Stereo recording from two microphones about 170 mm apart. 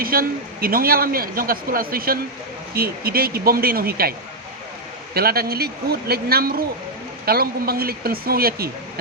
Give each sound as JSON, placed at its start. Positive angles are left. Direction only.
{"t": 0.0, "sound": "a man's voice", "side_deg": -60}
{"t": 5.1, "sound": "a man's voice", "side_deg": -65}